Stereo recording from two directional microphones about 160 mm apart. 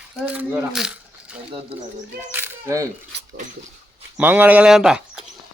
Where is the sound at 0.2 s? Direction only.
5° right (ahead or behind).